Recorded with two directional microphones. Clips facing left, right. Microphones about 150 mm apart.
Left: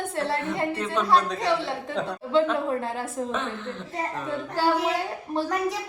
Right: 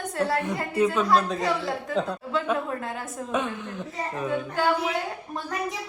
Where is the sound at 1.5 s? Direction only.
25° left (ahead or behind).